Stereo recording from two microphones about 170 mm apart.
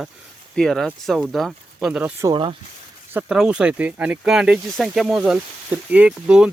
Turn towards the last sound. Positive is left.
turn(degrees=-5)  # may be behind; listen again after turning